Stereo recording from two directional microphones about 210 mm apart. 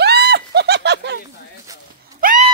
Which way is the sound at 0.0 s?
50° right (ahead or behind).